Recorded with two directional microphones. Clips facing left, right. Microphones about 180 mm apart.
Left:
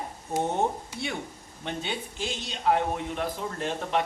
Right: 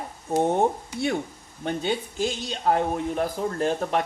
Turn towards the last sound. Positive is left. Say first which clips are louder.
# right 4 dB
turn(degrees=-45)  # may be behind; listen again after turning